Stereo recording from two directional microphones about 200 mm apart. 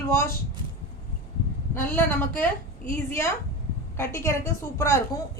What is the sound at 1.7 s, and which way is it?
A woman's voice, 10° left (ahead or behind).